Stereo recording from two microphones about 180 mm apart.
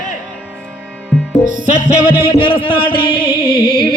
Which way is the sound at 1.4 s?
50° right (ahead or behind).